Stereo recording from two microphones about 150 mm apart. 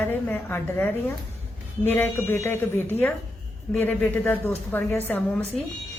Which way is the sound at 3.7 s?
10° left (ahead or behind).